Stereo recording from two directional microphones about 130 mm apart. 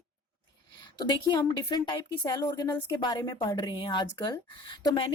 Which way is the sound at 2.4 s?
25° left (ahead or behind).